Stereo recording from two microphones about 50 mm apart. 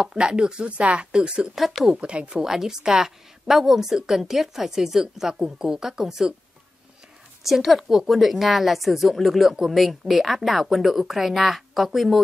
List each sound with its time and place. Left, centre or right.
0.0 s speech: centre
1.5 s speech: centre
1.9 s speech: right
2.4 s a woman's voice: centre
7.4 s speech: centre